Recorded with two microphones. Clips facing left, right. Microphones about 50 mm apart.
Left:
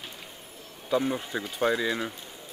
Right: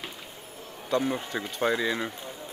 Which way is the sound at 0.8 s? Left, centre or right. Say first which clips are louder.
Even; centre.